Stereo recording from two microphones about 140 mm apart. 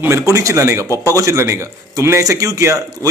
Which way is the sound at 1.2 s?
20° right (ahead or behind).